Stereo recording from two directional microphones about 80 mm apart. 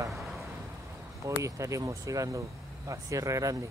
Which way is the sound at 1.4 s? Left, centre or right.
Right.